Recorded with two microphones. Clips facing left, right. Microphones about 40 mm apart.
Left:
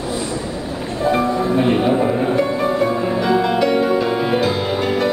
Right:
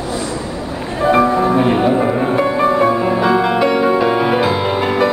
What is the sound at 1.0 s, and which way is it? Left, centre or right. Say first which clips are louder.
Music: right 5 dB; right.